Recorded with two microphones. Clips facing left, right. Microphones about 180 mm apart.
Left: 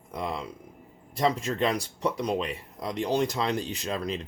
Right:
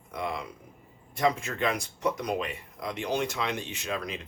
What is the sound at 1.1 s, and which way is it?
Speech, 35° left (ahead or behind).